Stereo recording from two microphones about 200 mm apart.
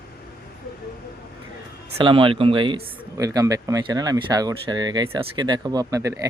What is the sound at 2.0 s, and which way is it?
Speech, 25° right (ahead or behind).